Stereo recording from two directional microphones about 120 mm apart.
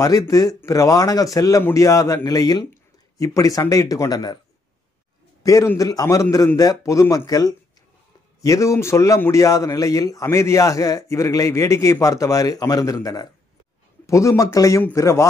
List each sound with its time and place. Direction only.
0.0 s speech: 30° left (ahead or behind)
5.4 s a man's voice: 25° left (ahead or behind)